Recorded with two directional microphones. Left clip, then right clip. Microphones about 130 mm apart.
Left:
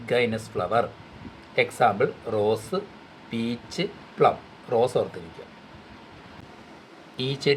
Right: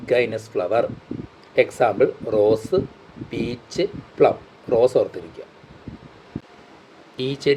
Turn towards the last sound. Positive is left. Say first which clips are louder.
# right 4 dB
turn(degrees=-25)  # may be behind; listen again after turning